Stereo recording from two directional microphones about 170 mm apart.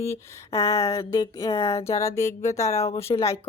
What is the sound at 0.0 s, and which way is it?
A woman's voice, 15° left (ahead or behind).